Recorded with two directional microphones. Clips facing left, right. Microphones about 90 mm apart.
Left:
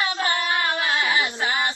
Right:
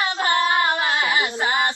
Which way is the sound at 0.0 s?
25° right (ahead or behind).